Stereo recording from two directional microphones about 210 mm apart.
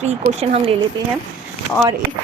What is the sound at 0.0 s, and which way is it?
Speech, 30° right (ahead or behind).